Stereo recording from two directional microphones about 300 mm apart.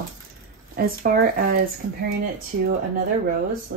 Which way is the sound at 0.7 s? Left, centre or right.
Right.